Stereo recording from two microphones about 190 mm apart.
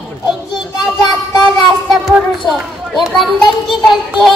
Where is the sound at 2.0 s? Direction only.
Centre (ahead or behind).